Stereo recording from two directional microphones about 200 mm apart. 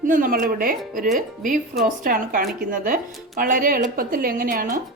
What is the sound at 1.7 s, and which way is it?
Speech, 40° right (ahead or behind).